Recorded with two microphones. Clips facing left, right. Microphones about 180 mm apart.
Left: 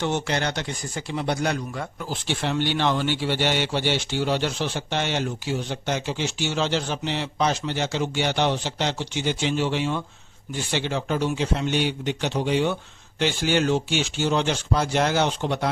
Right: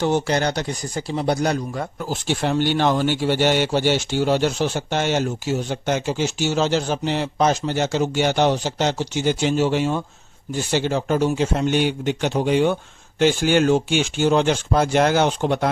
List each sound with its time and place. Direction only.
0.0 s speech: 40° right (ahead or behind)